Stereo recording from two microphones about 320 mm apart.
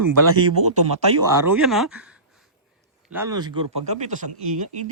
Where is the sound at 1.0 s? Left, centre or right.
Centre.